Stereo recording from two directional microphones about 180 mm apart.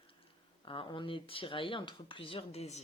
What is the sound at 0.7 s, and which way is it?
A woman's voice, 25° left (ahead or behind).